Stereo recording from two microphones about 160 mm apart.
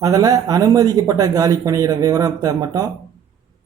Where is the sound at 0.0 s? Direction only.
20° right (ahead or behind).